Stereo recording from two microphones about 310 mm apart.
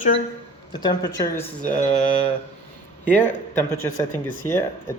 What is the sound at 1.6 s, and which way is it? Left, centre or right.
Speech, left.